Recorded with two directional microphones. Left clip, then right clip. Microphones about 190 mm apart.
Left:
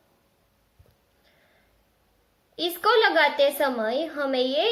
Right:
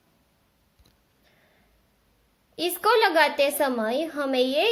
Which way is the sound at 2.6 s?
35° right (ahead or behind).